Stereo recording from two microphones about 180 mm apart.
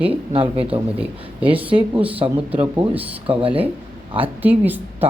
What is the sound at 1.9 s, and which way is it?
Speech, 10° right (ahead or behind).